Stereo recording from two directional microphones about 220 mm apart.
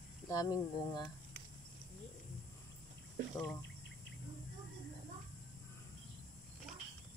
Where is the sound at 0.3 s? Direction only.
15° left (ahead or behind).